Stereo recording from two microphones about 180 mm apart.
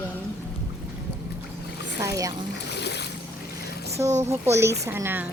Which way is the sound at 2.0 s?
20° right (ahead or behind).